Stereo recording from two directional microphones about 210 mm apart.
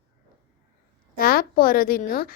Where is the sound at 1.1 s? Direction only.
45° left (ahead or behind).